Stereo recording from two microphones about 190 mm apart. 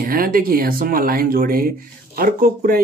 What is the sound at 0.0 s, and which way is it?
Speech, 50° right (ahead or behind).